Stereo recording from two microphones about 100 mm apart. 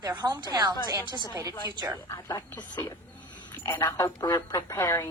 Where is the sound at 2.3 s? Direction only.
40° left (ahead or behind).